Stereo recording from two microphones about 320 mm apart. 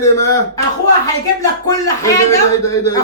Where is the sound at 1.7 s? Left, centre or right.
Centre.